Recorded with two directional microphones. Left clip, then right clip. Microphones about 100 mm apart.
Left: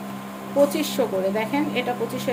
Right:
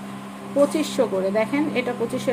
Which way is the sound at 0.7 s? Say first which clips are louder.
Right 1 dB; 35° right (ahead or behind).